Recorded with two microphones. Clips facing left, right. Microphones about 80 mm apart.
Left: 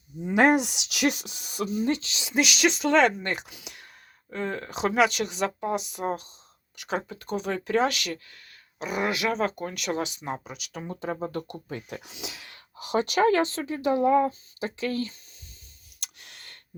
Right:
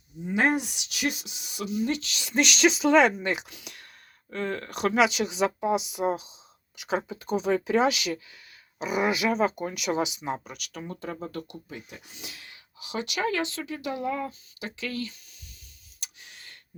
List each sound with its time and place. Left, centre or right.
0.3 s speech: left
2.3 s speech: centre
3.5 s speech: centre
4.9 s speech: centre
10.7 s speech: left
11.9 s speech: left
12.7 s speech: left
16.0 s a sound: left